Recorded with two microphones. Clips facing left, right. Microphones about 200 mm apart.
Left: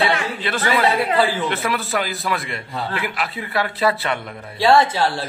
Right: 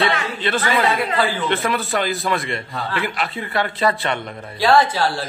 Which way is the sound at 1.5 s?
Centre (ahead or behind).